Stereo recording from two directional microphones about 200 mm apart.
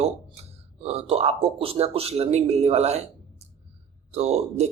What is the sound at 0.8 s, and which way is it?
Speech, 30° right (ahead or behind).